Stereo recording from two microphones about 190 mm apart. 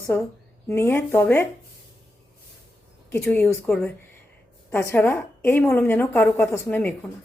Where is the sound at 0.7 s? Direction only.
10° left (ahead or behind).